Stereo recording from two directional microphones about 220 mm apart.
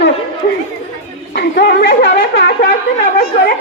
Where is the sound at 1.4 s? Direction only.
50° left (ahead or behind).